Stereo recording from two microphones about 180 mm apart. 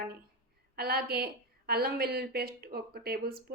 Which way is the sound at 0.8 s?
60° right (ahead or behind).